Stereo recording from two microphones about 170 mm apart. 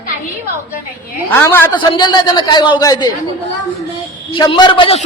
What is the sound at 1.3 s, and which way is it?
Speech, 15° left (ahead or behind).